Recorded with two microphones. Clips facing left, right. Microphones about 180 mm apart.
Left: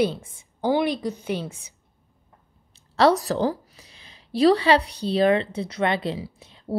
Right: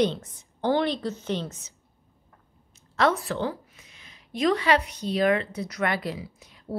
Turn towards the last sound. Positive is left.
turn(degrees=25)  # may be behind; listen again after turning